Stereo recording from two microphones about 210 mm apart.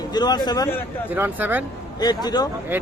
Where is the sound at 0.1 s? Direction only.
20° left (ahead or behind).